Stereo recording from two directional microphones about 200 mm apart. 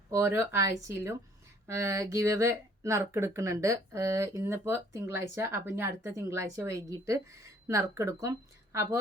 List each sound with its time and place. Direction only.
0.1 s speech: 10° right (ahead or behind)